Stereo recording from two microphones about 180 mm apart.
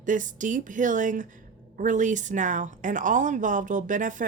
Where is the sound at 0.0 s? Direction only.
45° right (ahead or behind).